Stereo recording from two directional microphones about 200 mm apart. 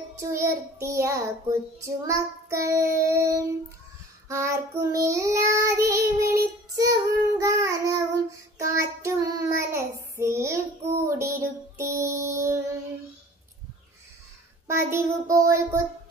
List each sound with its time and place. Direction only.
0.2 s child singing: 15° right (ahead or behind)
14.7 s child singing: 15° right (ahead or behind)